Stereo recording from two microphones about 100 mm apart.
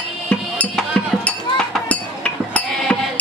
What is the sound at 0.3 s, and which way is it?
Music, 10° left (ahead or behind).